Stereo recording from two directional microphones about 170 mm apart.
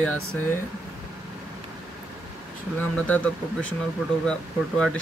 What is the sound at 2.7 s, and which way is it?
Speech, 10° left (ahead or behind).